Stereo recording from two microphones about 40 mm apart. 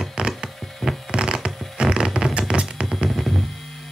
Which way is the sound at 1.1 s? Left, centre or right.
Right.